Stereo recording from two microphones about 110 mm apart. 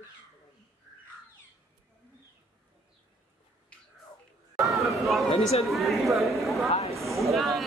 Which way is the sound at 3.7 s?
10° left (ahead or behind).